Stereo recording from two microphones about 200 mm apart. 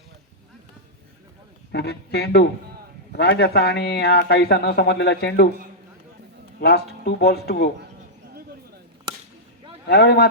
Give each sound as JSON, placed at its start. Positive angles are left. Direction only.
{"t": 1.7, "sound": "speech", "side_deg": 55}
{"t": 6.6, "sound": "speech", "side_deg": 55}
{"t": 9.8, "sound": "speech", "side_deg": 55}